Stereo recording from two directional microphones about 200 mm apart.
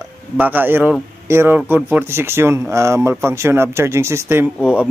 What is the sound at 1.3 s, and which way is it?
Speech, 10° right (ahead or behind).